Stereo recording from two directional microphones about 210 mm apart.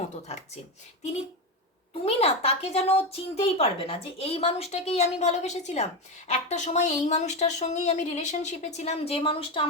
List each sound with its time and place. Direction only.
2.0 s speech: 30° left (ahead or behind)